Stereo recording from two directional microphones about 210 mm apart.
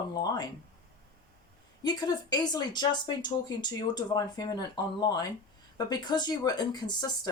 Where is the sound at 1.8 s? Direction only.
20° left (ahead or behind).